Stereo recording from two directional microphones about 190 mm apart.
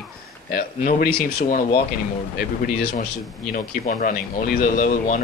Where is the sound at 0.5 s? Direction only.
50° left (ahead or behind).